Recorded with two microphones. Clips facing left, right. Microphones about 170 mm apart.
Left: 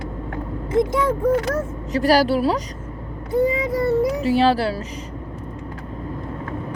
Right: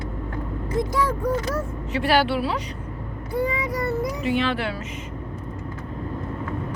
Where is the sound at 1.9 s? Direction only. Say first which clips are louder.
Left 4 dB; 40° left (ahead or behind).